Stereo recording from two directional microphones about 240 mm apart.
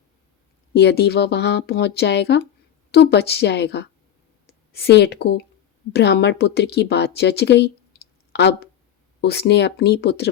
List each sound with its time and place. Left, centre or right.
0.7 s speech: left
8.3 s a sound: left
9.2 s speech: left